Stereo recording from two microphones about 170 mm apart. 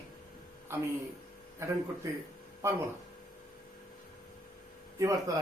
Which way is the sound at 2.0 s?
20° right (ahead or behind).